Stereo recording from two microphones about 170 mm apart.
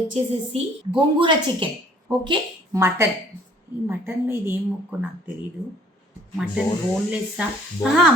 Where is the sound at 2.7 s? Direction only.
15° right (ahead or behind).